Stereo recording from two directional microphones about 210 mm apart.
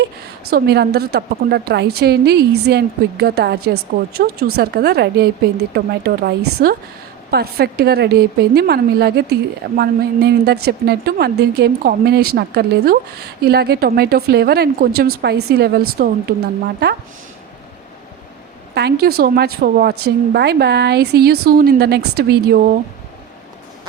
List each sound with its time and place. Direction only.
0.5 s speech: 50° right (ahead or behind)
18.7 s speech: 50° right (ahead or behind)